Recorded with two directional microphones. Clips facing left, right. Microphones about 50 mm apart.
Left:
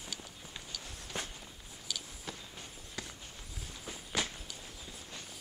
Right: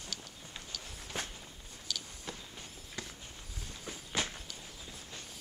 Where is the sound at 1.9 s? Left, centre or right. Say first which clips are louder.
Right 1 dB; centre.